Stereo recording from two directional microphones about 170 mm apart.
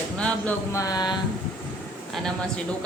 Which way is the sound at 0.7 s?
20° left (ahead or behind).